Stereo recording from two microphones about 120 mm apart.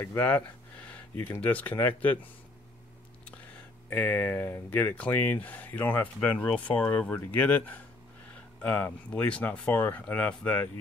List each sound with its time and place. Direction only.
0.0 s speech: 15° left (ahead or behind)
0.8 s a sound: 10° left (ahead or behind)
1.4 s speech: 15° left (ahead or behind)
3.9 s speech: 15° left (ahead or behind)